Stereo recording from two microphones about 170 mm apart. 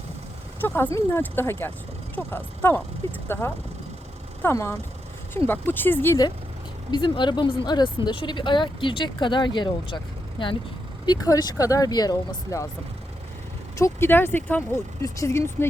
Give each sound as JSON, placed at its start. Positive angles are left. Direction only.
{"t": 0.6, "sound": "speech", "side_deg": 10}
{"t": 4.4, "sound": "speech", "side_deg": 15}
{"t": 6.9, "sound": "speech", "side_deg": 25}
{"t": 13.7, "sound": "speech", "side_deg": 15}